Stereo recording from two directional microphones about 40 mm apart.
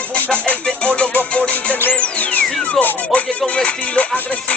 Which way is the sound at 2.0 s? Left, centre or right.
Left.